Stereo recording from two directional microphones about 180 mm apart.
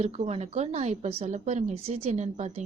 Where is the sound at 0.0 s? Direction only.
35° right (ahead or behind).